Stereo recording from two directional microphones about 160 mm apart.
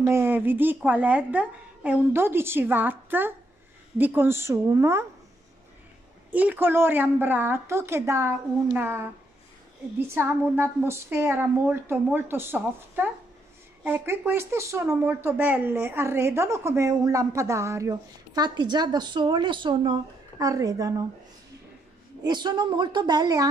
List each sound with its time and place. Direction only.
0.0 s a woman's voice: 15° right (ahead or behind)
6.3 s a woman's voice: 10° right (ahead or behind)
22.2 s speech: 25° right (ahead or behind)